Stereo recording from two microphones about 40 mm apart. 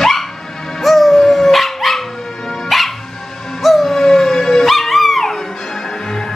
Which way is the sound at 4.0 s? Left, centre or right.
Centre.